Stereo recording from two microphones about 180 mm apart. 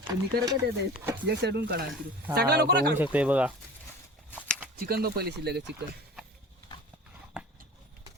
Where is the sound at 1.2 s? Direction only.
65° right (ahead or behind).